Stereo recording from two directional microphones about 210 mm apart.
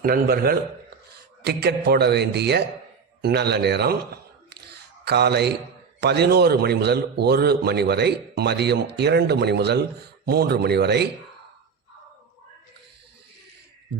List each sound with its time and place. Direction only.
0.0 s a man's voice: 45° right (ahead or behind)